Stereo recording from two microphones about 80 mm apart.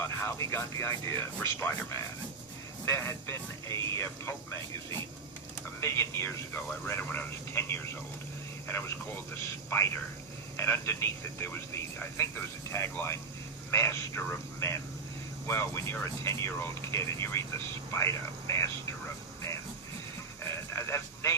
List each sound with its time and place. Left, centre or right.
0.0 s speech: left
5.8 s speech: left
9.4 s speech: left
15.4 s speech: left
20.4 s a sound: left